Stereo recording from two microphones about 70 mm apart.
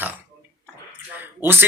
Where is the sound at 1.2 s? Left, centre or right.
Right.